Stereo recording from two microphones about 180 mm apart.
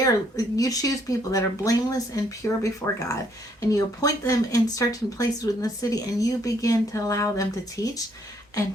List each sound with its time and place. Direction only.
0.0 s speech: 20° left (ahead or behind)